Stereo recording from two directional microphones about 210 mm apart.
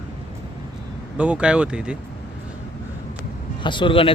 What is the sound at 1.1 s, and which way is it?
Speech, 5° right (ahead or behind).